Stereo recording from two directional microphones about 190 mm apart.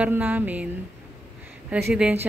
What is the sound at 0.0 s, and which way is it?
Speech, 10° right (ahead or behind).